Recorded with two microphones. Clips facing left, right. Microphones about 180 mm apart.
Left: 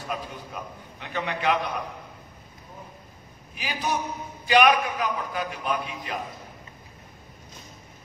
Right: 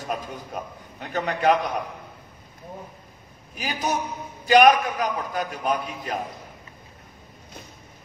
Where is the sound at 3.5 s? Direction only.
45° right (ahead or behind).